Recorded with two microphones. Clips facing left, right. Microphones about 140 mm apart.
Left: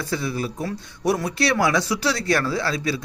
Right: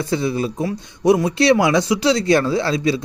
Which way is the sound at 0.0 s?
20° right (ahead or behind).